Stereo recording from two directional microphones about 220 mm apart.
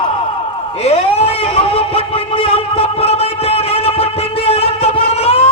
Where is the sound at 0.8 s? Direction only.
25° left (ahead or behind).